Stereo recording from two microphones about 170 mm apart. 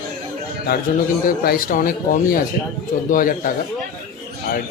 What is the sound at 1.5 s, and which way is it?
Speech, 55° left (ahead or behind).